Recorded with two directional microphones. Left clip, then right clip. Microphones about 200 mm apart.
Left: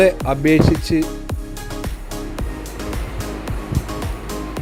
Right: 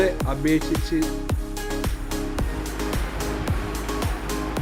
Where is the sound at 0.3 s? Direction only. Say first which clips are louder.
Left 8 dB; 35° left (ahead or behind).